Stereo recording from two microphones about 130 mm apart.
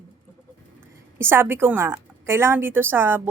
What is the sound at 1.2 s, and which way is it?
A woman's voice, 20° right (ahead or behind).